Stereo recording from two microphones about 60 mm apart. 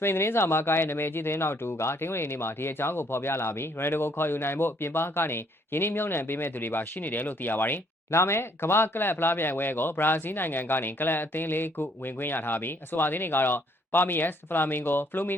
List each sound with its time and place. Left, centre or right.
0.0 s speech: left
8.1 s speech: left